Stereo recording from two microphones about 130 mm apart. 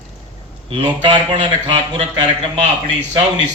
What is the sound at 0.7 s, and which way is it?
Speech, 45° right (ahead or behind).